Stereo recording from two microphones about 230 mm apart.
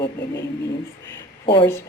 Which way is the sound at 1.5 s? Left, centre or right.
Centre.